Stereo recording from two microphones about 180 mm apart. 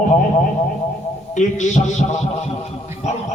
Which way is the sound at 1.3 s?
45° left (ahead or behind).